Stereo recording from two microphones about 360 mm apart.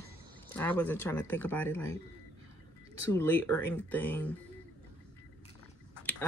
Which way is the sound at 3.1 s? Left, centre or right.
Centre.